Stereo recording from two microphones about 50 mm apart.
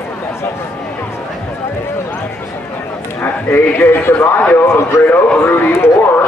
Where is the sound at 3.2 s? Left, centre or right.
Left.